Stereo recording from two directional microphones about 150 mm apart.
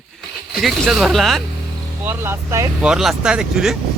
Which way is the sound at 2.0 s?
15° right (ahead or behind).